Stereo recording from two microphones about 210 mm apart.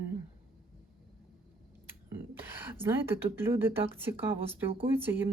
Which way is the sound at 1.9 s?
10° right (ahead or behind).